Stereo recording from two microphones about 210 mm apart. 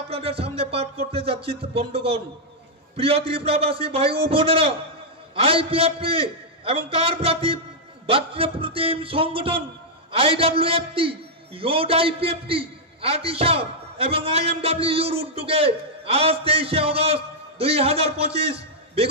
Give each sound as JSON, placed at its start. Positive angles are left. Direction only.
{"t": 0.1, "sound": "a man's voice", "side_deg": -25}